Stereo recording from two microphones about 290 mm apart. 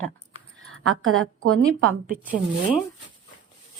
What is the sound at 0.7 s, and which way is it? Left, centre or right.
Speech, right.